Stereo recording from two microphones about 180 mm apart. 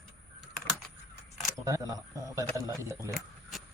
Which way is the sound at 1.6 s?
20° right (ahead or behind).